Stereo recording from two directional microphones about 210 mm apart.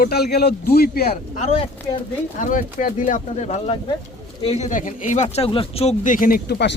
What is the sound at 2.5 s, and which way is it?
Speech, 40° left (ahead or behind).